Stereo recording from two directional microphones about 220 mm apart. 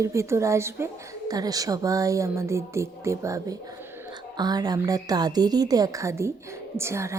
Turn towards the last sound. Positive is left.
turn(degrees=-10)  # may be behind; listen again after turning